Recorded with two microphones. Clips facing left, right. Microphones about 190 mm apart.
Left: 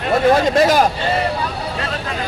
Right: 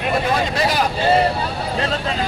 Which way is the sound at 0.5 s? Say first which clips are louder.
Left 6 dB; 45° left (ahead or behind).